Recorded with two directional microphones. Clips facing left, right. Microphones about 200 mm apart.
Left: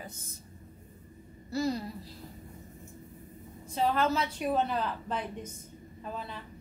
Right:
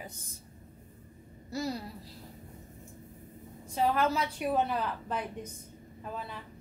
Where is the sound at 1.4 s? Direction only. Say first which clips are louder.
Left 4 dB; 10° right (ahead or behind).